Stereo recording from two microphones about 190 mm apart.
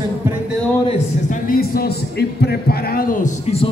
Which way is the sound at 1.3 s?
50° left (ahead or behind).